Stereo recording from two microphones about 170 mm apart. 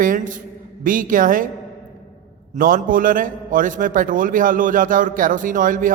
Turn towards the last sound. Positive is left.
turn(degrees=-50)  # may be behind; listen again after turning